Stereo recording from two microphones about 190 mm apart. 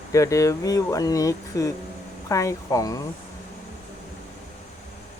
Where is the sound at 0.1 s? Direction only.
15° left (ahead or behind).